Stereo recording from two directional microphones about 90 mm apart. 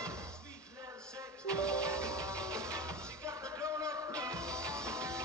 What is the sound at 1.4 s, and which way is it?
Music, 40° right (ahead or behind).